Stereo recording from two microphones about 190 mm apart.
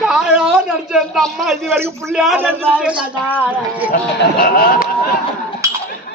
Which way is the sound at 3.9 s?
55° left (ahead or behind).